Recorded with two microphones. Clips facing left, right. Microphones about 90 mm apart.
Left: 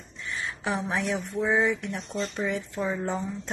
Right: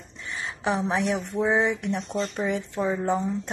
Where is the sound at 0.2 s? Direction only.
20° right (ahead or behind).